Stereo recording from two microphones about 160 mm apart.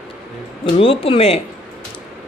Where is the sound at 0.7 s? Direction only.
35° left (ahead or behind).